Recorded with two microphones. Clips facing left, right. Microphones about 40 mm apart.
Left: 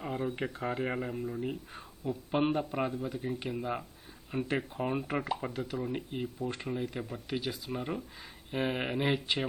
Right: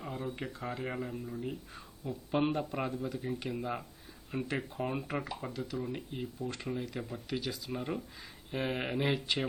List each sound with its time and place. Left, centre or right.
0.3 s speech: left
6.1 s speech: left